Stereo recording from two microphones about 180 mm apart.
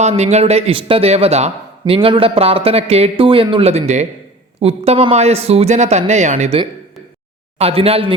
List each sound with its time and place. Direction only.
0.0 s a man's voice: 35° right (ahead or behind)
7.6 s a man's voice: 35° right (ahead or behind)